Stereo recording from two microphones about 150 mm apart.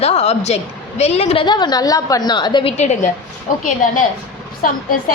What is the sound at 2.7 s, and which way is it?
Speech, 50° left (ahead or behind).